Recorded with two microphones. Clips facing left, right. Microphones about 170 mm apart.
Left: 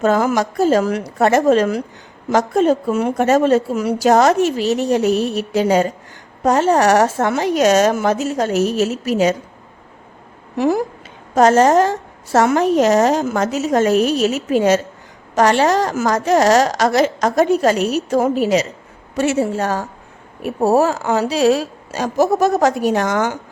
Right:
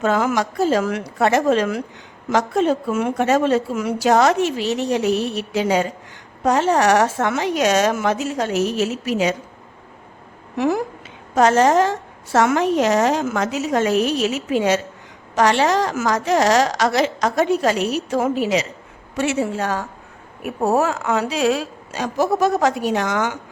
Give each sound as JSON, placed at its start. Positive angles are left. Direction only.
{"t": 0.0, "sound": "a woman's voice", "side_deg": 40}
{"t": 11.3, "sound": "a woman's voice", "side_deg": 40}